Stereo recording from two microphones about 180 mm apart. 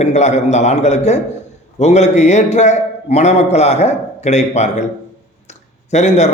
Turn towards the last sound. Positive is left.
turn(degrees=40)  # may be behind; listen again after turning